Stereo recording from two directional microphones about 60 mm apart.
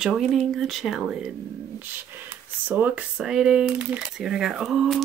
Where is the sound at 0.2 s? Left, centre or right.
Centre.